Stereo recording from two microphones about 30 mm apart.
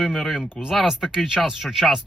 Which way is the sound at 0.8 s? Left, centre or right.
Centre.